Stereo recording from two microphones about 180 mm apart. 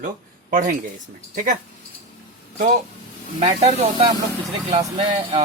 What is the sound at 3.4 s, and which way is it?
Speech, 35° right (ahead or behind).